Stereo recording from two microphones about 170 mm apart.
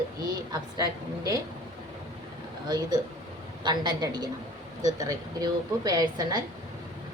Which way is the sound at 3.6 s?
25° right (ahead or behind).